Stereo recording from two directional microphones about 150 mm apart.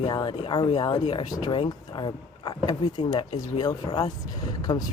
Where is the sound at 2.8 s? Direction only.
45° left (ahead or behind).